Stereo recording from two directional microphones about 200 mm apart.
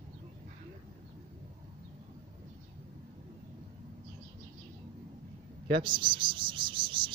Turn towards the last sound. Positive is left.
turn(degrees=-25)  # may be behind; listen again after turning